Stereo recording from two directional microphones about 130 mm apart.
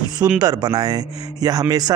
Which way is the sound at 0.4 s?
30° right (ahead or behind).